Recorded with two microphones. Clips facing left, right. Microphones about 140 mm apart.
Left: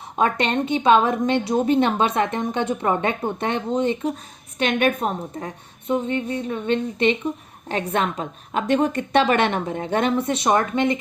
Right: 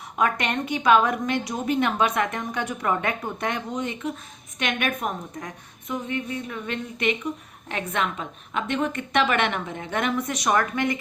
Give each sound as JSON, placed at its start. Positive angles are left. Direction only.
{"t": 0.2, "sound": "a woman's voice", "side_deg": 30}